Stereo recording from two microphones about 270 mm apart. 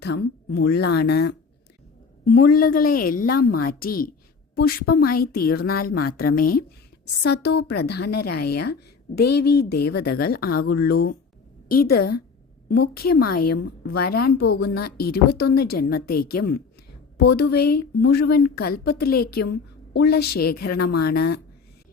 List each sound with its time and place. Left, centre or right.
0.0 s a woman's voice: left